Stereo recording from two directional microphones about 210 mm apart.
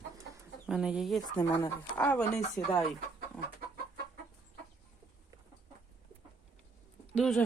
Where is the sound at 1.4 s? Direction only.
10° left (ahead or behind).